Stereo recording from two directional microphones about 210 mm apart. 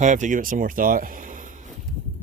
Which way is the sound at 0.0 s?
35° right (ahead or behind).